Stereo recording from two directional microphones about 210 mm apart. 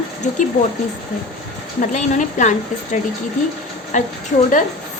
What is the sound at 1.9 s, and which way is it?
A woman's voice, 35° left (ahead or behind).